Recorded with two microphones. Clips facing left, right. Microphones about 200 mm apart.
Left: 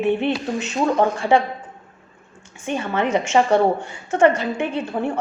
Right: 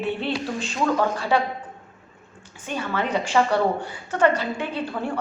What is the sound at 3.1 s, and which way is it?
A woman's voice, 25° left (ahead or behind).